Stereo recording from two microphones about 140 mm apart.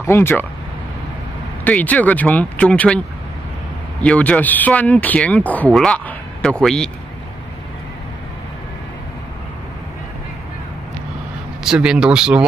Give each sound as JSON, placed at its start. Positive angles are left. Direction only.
{"t": 0.0, "sound": "speech", "side_deg": 15}
{"t": 1.6, "sound": "speech", "side_deg": 10}
{"t": 4.0, "sound": "speech", "side_deg": 10}
{"t": 11.6, "sound": "speech", "side_deg": -5}